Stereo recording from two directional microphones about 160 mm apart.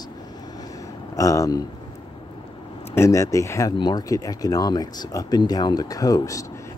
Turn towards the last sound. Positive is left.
turn(degrees=20)  # may be behind; listen again after turning